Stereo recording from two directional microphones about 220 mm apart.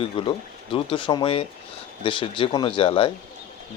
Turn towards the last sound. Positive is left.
turn(degrees=25)  # may be behind; listen again after turning